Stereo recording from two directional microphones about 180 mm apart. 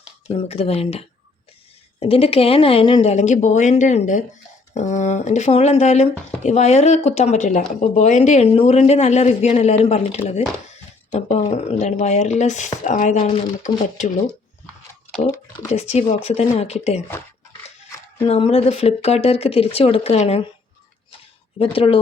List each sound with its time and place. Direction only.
0.3 s speech: 35° left (ahead or behind)
15.7 s speech: 35° left (ahead or behind)
18.3 s speech: 30° left (ahead or behind)
21.6 s speech: 30° left (ahead or behind)